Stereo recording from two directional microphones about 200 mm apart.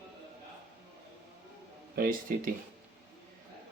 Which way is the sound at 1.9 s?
45° right (ahead or behind).